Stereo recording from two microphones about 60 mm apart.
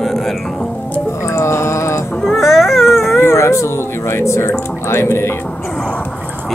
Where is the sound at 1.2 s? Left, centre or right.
Left.